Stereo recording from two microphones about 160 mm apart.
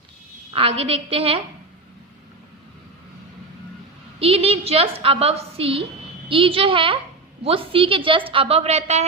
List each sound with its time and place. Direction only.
0.5 s a woman's voice: 35° right (ahead or behind)
4.2 s a woman's voice: 35° right (ahead or behind)